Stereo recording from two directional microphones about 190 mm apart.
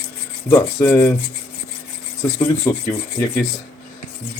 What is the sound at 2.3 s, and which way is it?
Speech, 15° left (ahead or behind).